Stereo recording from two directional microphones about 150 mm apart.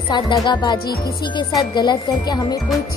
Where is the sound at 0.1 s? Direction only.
30° left (ahead or behind).